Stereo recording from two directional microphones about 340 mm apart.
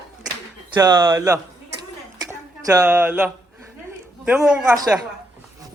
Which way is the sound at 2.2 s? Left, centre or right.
Centre.